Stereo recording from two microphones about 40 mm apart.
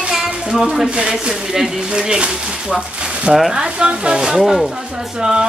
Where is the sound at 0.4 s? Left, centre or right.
Centre.